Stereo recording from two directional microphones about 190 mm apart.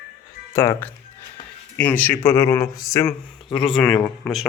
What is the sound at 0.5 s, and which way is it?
Speech, 15° left (ahead or behind).